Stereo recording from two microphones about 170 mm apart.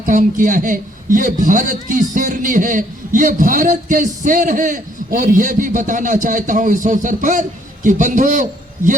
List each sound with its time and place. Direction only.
0.0 s a man's voice: 50° right (ahead or behind)